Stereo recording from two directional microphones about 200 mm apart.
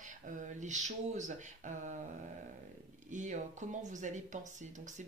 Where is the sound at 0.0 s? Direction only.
40° right (ahead or behind).